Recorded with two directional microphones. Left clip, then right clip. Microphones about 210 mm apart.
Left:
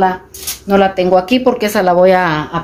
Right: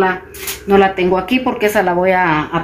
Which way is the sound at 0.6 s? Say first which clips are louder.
Even; 55° left (ahead or behind).